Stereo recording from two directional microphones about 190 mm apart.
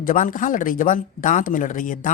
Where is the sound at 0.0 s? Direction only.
45° left (ahead or behind).